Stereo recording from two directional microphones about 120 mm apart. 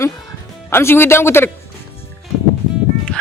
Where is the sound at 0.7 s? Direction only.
20° left (ahead or behind).